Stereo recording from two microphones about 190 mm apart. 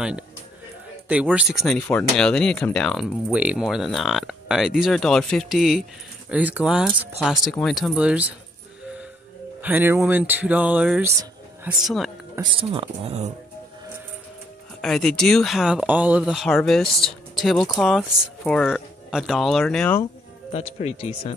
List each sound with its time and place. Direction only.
1.3 s speech: 5° right (ahead or behind)
9.6 s speech: 10° right (ahead or behind)
12.4 s speech: 25° right (ahead or behind)
14.8 s speech: centre (ahead or behind)
20.5 s speech: 35° left (ahead or behind)